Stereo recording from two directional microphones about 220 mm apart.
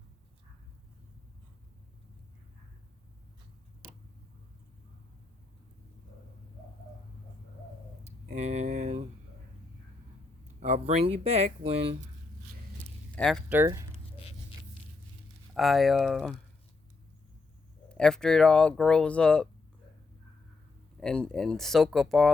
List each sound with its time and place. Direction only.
8.4 s a sound: 30° right (ahead or behind)
10.6 s speech: 30° right (ahead or behind)
13.1 s speech: 5° left (ahead or behind)
13.5 s speech: 10° right (ahead or behind)
14.2 s a sound: 25° left (ahead or behind)
15.5 s speech: centre (ahead or behind)
17.8 s speech: 5° left (ahead or behind)
21.0 s speech: 5° left (ahead or behind)